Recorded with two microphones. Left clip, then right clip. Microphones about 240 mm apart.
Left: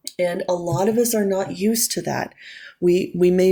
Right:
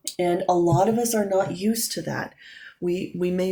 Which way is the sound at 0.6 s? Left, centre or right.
Left.